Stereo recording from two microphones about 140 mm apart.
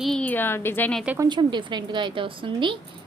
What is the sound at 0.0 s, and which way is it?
Speech, 5° left (ahead or behind).